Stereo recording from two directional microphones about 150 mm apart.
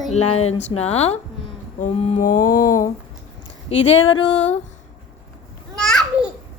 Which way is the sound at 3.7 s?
40° left (ahead or behind).